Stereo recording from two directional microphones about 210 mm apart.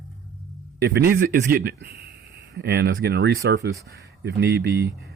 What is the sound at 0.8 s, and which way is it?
Speech, 55° right (ahead or behind).